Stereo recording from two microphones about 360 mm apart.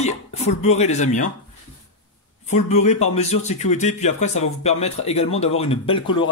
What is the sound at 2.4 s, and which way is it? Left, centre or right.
Speech, centre.